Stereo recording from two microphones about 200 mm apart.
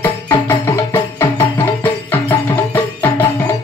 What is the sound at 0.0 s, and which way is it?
Music, 10° left (ahead or behind).